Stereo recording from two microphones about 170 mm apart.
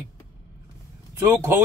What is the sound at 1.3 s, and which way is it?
Speech, 15° right (ahead or behind).